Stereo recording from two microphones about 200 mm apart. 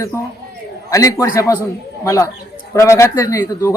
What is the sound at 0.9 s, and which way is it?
A man's voice, 15° left (ahead or behind).